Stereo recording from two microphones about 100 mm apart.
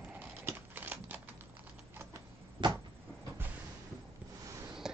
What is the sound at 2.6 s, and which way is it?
Cupboard open or close, 55° right (ahead or behind).